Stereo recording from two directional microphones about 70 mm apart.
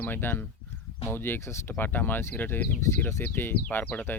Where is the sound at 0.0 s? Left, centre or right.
Left.